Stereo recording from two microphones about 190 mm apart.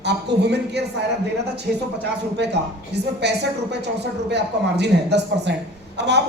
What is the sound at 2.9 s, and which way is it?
A woman's voice, 60° right (ahead or behind).